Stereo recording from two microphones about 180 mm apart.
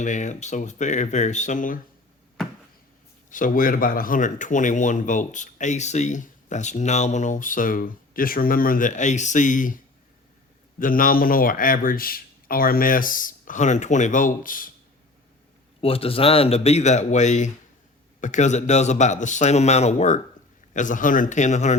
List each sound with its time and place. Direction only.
0.0 s speech: 40° left (ahead or behind)
3.2 s speech: 50° left (ahead or behind)
10.8 s speech: 50° left (ahead or behind)
15.8 s speech: 30° left (ahead or behind)